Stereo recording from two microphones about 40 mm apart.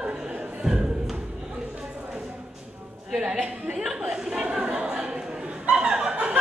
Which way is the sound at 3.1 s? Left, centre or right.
Centre.